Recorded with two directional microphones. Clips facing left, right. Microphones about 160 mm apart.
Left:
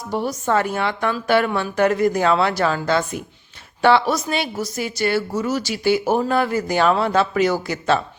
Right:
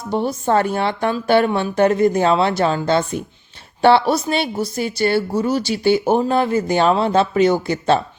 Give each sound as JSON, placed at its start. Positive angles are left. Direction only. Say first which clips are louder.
{"t": 0.0, "sound": "a woman's voice", "louder": "right 3 dB", "side_deg": -25}